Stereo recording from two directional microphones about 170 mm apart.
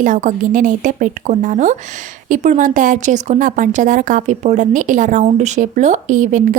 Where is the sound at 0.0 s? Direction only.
50° right (ahead or behind).